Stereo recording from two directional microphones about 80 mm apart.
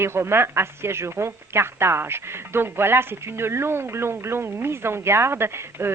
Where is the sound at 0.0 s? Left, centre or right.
Right.